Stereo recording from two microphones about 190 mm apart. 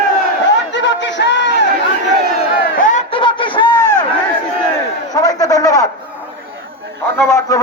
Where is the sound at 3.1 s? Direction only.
25° left (ahead or behind).